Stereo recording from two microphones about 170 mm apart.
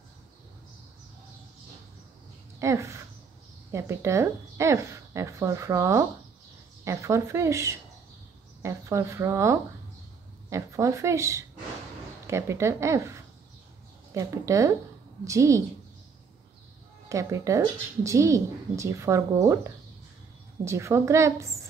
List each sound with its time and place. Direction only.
2.6 s speech: 15° right (ahead or behind)
17.1 s speech: 20° right (ahead or behind)
20.6 s speech: 15° right (ahead or behind)